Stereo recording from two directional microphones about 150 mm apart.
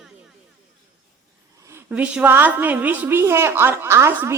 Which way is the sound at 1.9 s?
5° right (ahead or behind).